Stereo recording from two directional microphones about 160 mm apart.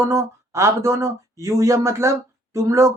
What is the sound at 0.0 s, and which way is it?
Speech, 20° right (ahead or behind).